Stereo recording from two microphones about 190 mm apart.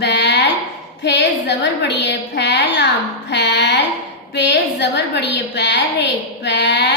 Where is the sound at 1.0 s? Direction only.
65° left (ahead or behind).